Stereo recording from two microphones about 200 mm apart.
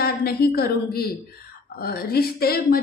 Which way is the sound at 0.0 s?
50° left (ahead or behind).